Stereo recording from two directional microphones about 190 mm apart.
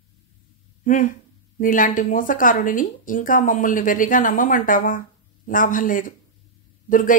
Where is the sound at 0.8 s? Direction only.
45° left (ahead or behind).